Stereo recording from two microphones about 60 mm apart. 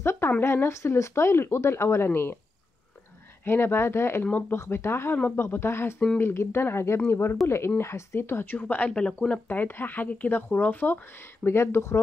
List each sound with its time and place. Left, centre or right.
0.0 s a sound: left
0.7 s speech: left
3.4 s speech: left
4.2 s speech: left
4.6 s speech: left
5.1 s a woman's voice: left
5.4 s speech: left
8.5 s a woman's voice: left